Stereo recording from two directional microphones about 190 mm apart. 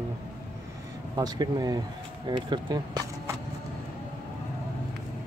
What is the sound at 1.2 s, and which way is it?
Speech, 20° right (ahead or behind).